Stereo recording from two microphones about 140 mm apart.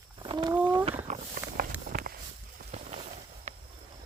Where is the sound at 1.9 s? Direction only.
90° right.